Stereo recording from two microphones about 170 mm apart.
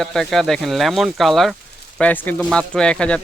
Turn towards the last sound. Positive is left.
turn(degrees=5)  # may be behind; listen again after turning